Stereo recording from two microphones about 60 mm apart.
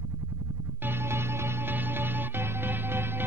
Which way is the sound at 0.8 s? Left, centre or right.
Right.